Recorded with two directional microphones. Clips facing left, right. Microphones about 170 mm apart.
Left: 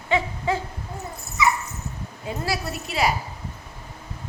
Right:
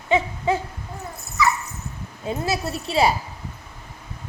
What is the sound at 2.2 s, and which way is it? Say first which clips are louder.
Speech: right 3 dB; 25° right (ahead or behind).